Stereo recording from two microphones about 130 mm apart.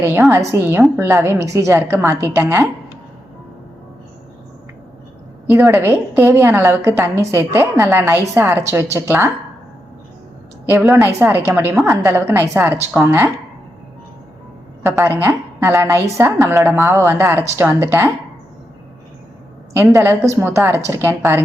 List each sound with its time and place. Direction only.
0.0 s a woman's voice: 20° right (ahead or behind)
5.6 s a woman's voice: 20° right (ahead or behind)
10.9 s a woman's voice: 15° right (ahead or behind)
14.8 s a woman's voice: 20° right (ahead or behind)
19.7 s a woman's voice: 20° right (ahead or behind)